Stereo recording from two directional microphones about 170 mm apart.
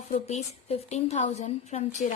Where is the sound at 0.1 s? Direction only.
40° left (ahead or behind).